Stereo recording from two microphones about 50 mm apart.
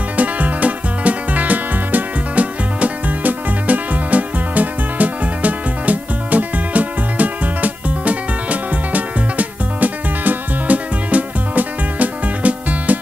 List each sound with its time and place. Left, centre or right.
0.2 s music: right